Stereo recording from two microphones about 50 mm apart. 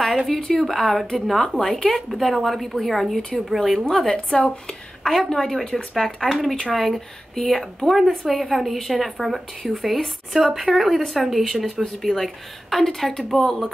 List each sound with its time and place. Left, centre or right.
0.0 s a woman's voice: centre
3.8 s speech: centre
6.7 s a woman's voice: centre